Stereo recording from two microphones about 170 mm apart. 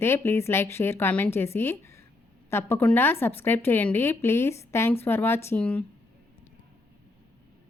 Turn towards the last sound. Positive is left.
turn(degrees=10)  # may be behind; listen again after turning